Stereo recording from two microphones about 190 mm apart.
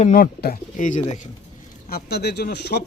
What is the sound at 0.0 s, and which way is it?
Speech, 45° left (ahead or behind).